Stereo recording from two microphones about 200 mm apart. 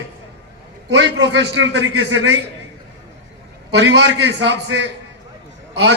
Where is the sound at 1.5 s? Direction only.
70° right (ahead or behind).